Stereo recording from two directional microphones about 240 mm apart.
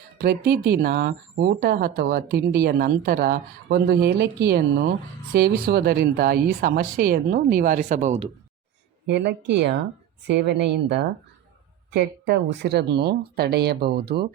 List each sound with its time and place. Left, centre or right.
0.2 s speech: right
9.0 s speech: right